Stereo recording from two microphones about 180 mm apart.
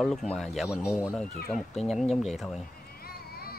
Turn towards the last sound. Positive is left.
turn(degrees=60)  # may be behind; listen again after turning